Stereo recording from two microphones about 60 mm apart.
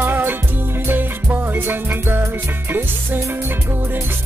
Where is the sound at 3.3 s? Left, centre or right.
Right.